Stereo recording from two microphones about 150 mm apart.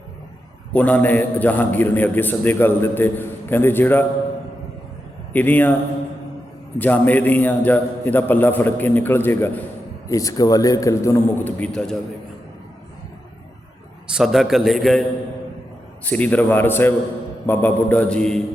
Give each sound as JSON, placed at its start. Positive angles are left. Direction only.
{"t": 0.7, "sound": "a man's voice", "side_deg": 10}
{"t": 5.3, "sound": "a man's voice", "side_deg": 10}
{"t": 6.7, "sound": "a man's voice", "side_deg": 10}
{"t": 14.1, "sound": "a man's voice", "side_deg": 0}
{"t": 16.0, "sound": "a man's voice", "side_deg": 10}